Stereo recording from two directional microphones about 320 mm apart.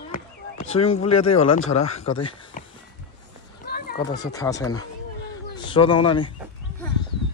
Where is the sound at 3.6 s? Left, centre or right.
Left.